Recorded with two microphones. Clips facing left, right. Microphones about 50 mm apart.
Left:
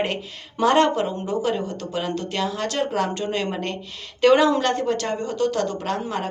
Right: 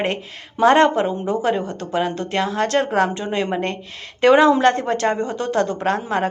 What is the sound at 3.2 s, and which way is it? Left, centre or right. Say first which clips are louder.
A woman's voice: right 3 dB; right.